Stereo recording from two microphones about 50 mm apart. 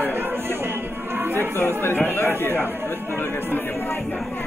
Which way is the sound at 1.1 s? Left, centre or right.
Right.